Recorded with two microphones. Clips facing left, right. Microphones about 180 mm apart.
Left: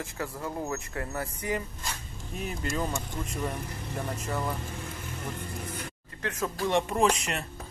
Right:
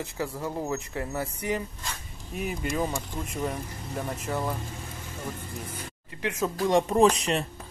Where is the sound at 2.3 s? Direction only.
5° right (ahead or behind).